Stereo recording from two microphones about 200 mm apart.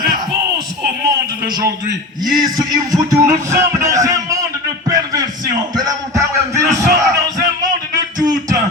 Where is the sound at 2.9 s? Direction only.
15° right (ahead or behind).